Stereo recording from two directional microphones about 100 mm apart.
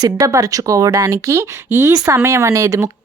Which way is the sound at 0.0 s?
30° right (ahead or behind).